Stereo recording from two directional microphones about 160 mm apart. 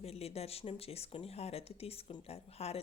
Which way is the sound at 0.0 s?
40° left (ahead or behind).